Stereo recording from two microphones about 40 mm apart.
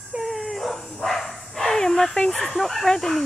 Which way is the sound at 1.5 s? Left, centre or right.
Centre.